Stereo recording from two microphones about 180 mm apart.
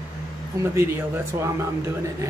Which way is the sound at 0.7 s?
15° right (ahead or behind).